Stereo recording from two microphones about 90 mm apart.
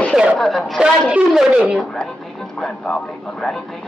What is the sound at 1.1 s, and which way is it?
Speech, 10° right (ahead or behind).